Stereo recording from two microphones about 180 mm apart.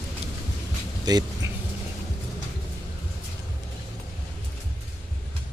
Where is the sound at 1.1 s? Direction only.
20° right (ahead or behind).